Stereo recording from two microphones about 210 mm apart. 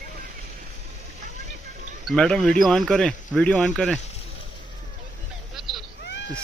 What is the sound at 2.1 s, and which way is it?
Speech, 5° left (ahead or behind).